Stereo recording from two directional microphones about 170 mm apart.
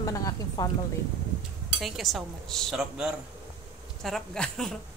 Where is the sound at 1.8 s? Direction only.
Centre (ahead or behind).